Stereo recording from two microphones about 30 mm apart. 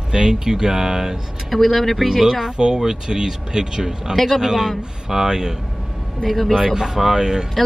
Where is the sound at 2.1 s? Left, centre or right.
Centre.